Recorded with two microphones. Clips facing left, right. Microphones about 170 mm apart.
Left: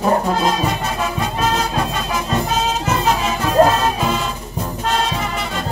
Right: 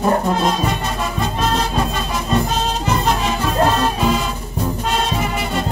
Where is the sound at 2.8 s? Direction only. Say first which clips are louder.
Even; 5° left (ahead or behind).